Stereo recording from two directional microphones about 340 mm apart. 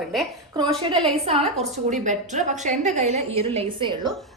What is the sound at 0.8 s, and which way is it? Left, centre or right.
A woman's voice, centre.